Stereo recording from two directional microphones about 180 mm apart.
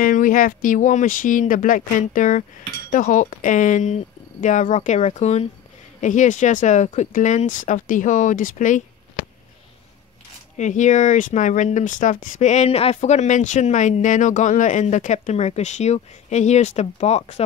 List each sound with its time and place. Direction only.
0.0 s speech: 50° left (ahead or behind)
10.6 s speech: 45° left (ahead or behind)